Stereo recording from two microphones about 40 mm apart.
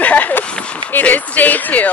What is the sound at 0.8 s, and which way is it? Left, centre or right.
Speech, left.